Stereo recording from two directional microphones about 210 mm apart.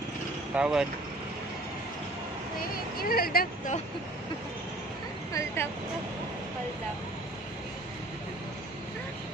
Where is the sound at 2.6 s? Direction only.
45° left (ahead or behind).